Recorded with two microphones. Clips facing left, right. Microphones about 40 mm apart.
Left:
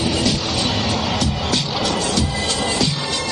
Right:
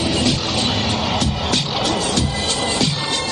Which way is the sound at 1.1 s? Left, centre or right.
Right.